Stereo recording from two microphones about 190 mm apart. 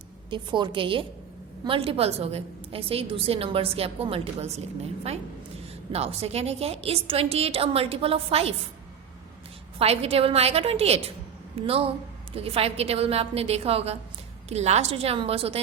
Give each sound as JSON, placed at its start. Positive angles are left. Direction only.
{"t": 0.3, "sound": "a woman's voice", "side_deg": -25}
{"t": 5.9, "sound": "a woman's voice", "side_deg": -30}
{"t": 9.7, "sound": "a woman's voice", "side_deg": -30}